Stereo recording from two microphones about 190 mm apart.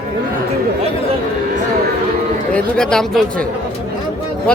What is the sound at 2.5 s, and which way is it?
Speech, 5° left (ahead or behind).